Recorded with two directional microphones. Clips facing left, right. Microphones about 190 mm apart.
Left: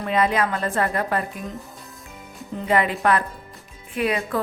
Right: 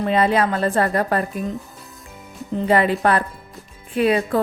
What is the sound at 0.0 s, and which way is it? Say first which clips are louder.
Speech: right 3 dB; 30° right (ahead or behind).